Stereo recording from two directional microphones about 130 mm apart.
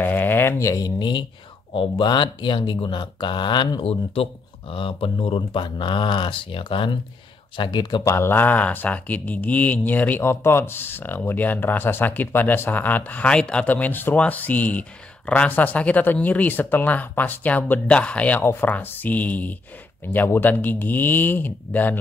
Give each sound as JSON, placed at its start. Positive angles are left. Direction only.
{"t": 0.0, "sound": "speech", "side_deg": 15}
{"t": 8.1, "sound": "speech", "side_deg": 20}